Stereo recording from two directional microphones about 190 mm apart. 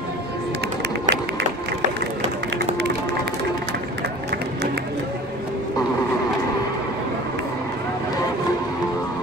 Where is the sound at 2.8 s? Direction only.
60° right (ahead or behind).